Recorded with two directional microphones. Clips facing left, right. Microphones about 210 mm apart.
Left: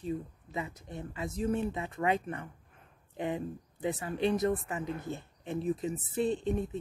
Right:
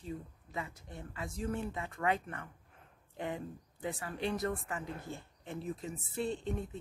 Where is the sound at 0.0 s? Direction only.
20° left (ahead or behind).